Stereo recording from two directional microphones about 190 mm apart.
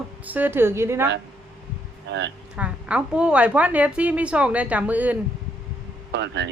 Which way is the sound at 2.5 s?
5° right (ahead or behind).